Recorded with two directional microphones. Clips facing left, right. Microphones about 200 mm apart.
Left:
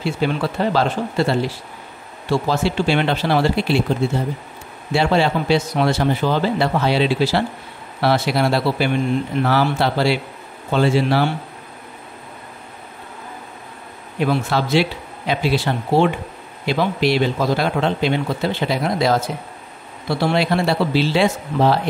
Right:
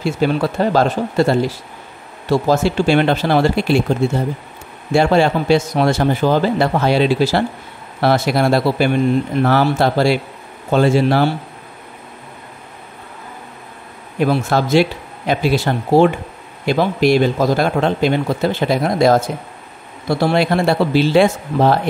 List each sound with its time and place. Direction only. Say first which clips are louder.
0.0 s a man's voice: right 4 dB; 45° right (ahead or behind)
4.9 s a man's voice: right 4 dB; 45° right (ahead or behind)
14.2 s a man's voice: right 3 dB; 45° right (ahead or behind)